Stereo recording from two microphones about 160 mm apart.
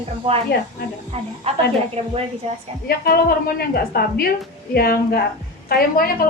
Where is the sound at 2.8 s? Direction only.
70° left (ahead or behind).